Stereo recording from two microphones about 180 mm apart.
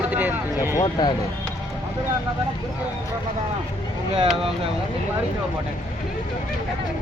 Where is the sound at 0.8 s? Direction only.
25° left (ahead or behind).